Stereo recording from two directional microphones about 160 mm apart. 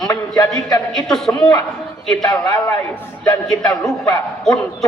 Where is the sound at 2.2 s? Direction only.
20° left (ahead or behind).